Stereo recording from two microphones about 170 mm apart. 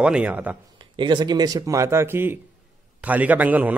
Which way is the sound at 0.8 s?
25° right (ahead or behind).